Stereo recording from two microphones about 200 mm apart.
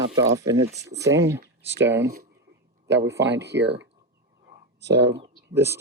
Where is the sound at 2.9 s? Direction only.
60° right (ahead or behind).